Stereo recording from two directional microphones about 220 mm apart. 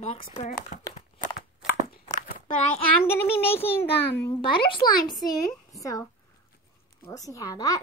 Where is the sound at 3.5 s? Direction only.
25° left (ahead or behind).